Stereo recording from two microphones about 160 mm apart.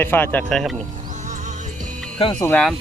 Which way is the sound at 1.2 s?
50° right (ahead or behind).